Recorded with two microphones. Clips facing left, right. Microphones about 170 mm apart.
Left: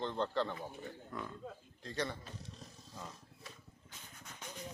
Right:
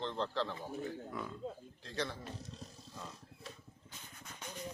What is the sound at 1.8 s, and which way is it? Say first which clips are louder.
Speech: left 1 dB; centre (ahead or behind).